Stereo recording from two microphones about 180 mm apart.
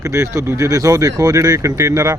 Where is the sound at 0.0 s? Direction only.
15° right (ahead or behind).